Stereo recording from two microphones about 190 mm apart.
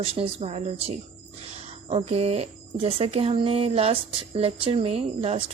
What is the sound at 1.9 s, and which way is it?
Speech, 30° right (ahead or behind).